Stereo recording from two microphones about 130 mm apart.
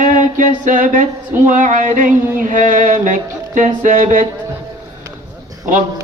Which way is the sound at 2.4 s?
85° right.